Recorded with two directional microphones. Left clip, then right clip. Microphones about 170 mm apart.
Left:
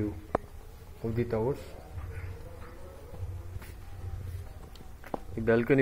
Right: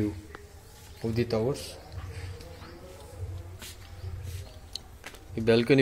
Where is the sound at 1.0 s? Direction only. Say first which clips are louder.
Right 2 dB; 15° right (ahead or behind).